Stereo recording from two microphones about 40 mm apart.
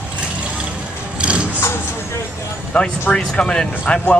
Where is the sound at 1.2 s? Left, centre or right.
Right.